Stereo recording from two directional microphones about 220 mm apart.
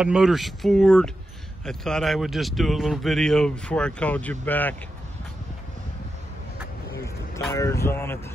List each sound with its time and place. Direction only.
0.0 s speech: centre (ahead or behind)
7.3 s speech: 15° left (ahead or behind)